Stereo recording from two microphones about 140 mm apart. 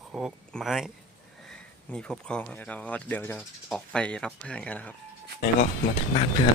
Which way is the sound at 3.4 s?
Centre (ahead or behind).